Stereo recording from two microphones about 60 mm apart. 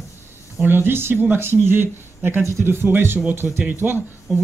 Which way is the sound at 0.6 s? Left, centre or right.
Right.